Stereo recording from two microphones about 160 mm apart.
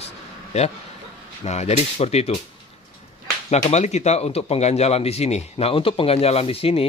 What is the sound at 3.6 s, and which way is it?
A man's voice, 45° left (ahead or behind).